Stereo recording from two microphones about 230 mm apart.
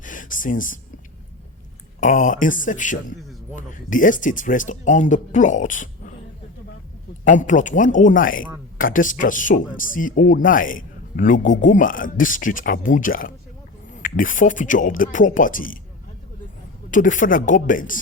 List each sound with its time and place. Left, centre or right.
0.0 s a sound: left
2.0 s speech: left
7.3 s speech: left
16.9 s speech: left